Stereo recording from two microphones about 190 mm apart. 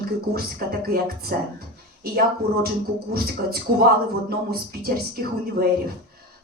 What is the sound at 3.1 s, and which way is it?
Speech, 50° right (ahead or behind).